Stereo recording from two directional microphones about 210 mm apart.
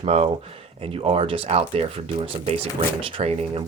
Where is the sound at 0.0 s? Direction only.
30° right (ahead or behind).